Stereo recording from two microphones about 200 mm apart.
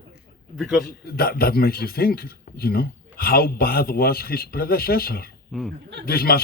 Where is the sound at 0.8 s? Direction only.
50° left (ahead or behind).